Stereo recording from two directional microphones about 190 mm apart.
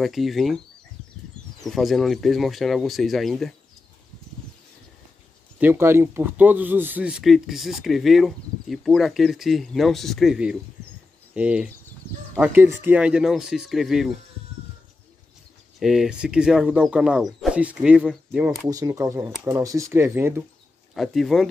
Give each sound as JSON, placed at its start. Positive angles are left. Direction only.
{"t": 0.0, "sound": "speech", "side_deg": 0}
{"t": 1.6, "sound": "speech", "side_deg": 0}
{"t": 5.6, "sound": "speech", "side_deg": -10}
{"t": 15.8, "sound": "speech", "side_deg": 0}
{"t": 18.7, "sound": "speech", "side_deg": -20}
{"t": 20.9, "sound": "speech", "side_deg": 0}